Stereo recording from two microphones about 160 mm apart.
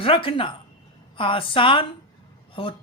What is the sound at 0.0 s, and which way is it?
A woman's voice, 35° left (ahead or behind).